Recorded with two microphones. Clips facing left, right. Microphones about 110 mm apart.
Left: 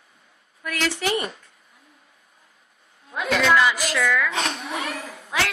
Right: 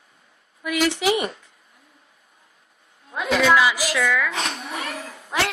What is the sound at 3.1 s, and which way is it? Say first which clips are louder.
A woman's voice: right 2 dB; 5° right (ahead or behind).